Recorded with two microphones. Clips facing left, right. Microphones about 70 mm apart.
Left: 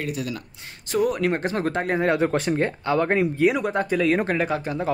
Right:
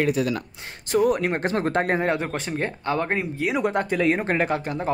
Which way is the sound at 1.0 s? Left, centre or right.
Right.